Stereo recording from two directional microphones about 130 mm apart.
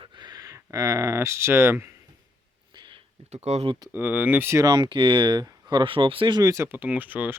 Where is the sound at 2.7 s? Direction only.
35° right (ahead or behind).